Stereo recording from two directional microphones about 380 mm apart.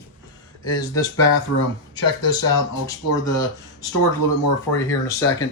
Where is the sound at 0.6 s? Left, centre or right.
Centre.